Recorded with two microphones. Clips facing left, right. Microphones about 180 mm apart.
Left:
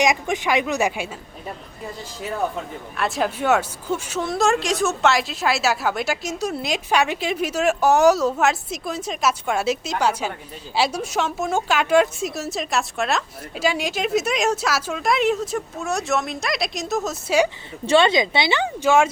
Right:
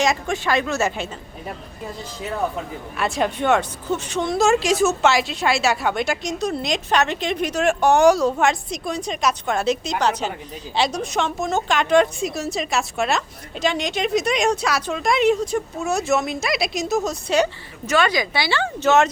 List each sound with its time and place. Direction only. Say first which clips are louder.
0.0 s a woman's voice: left 1 dB; 15° left (ahead or behind)
3.0 s a woman's voice: right 1 dB; 5° left (ahead or behind)
17.8 s speech: left 3 dB; 25° left (ahead or behind); by 19.0 s 10° left (ahead or behind)